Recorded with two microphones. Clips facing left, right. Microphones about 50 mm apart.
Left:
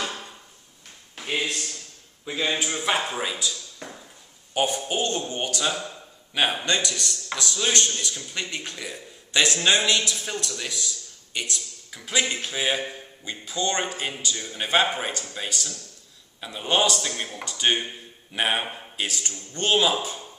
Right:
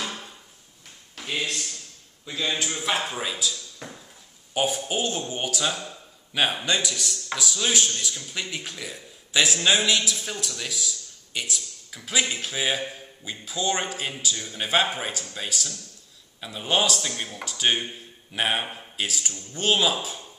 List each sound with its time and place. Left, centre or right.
1.1 s a man's voice: centre